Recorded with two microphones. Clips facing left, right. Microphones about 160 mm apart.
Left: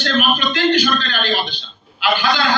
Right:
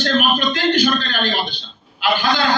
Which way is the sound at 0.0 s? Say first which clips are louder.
Right 1 dB; 45° right (ahead or behind).